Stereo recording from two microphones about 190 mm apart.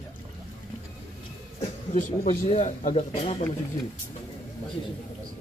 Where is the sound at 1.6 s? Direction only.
40° left (ahead or behind).